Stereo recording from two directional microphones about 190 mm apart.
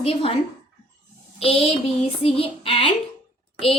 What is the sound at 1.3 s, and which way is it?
A woman's voice, 30° left (ahead or behind).